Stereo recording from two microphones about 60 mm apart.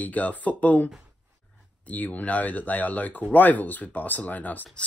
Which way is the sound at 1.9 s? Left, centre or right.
Left.